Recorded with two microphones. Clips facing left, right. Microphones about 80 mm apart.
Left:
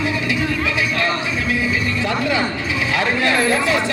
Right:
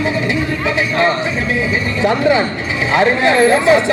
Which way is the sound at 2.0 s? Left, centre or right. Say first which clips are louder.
Right 9 dB; right.